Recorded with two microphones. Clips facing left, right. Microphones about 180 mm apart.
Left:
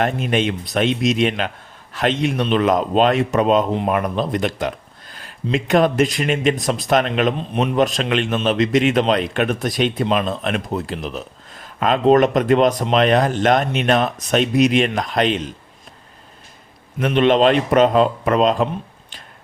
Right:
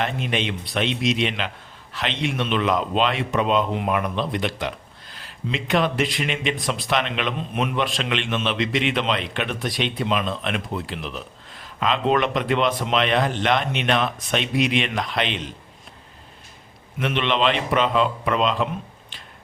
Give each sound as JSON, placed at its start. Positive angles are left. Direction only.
{"t": 0.0, "sound": "speech", "side_deg": 45}
{"t": 17.0, "sound": "speech", "side_deg": 40}